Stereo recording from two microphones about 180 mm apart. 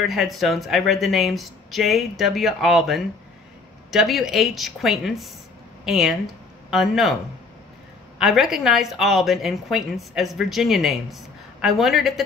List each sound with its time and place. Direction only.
0.0 s a woman's voice: centre (ahead or behind)
8.2 s a woman's voice: centre (ahead or behind)